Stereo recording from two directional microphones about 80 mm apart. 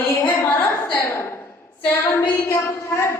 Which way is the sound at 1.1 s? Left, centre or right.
Left.